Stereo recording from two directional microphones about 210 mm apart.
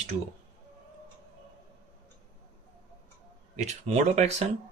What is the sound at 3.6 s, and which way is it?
Speech, 30° right (ahead or behind).